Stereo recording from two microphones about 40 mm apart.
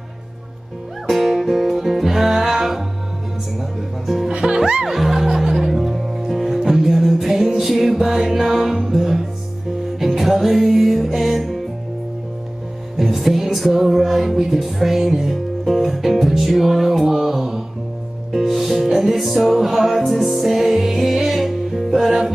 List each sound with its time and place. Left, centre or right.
1.0 s music: centre
4.3 s music: centre
12.9 s music: centre